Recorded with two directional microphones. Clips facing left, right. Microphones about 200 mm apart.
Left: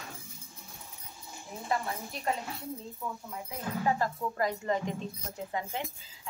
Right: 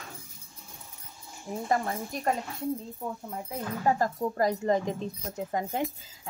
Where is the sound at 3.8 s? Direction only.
40° right (ahead or behind).